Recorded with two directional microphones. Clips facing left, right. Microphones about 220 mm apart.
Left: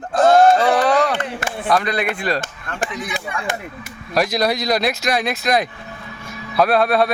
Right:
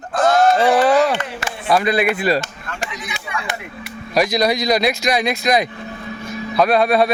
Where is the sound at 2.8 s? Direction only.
50° left (ahead or behind).